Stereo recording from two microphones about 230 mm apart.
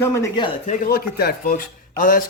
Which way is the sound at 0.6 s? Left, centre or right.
Left.